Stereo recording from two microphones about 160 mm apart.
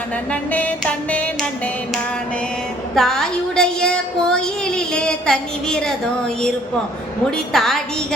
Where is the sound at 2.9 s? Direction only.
Centre (ahead or behind).